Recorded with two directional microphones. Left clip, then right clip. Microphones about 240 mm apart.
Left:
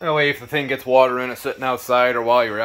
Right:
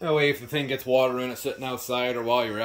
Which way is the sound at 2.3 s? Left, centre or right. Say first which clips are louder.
Left 5 dB; centre.